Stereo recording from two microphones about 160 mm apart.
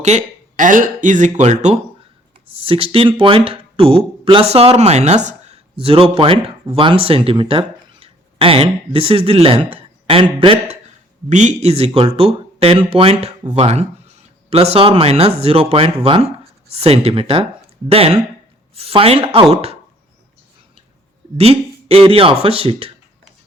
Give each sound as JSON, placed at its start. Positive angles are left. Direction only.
{"t": 0.0, "sound": "speech", "side_deg": -45}
{"t": 21.3, "sound": "speech", "side_deg": -40}